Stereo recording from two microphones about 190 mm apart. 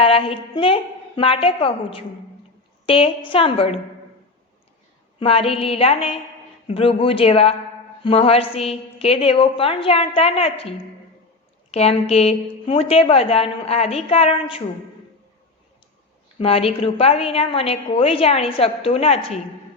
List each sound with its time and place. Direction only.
0.0 s a woman's voice: 30° left (ahead or behind)
5.2 s a woman's voice: 30° left (ahead or behind)
16.4 s a woman's voice: 30° left (ahead or behind)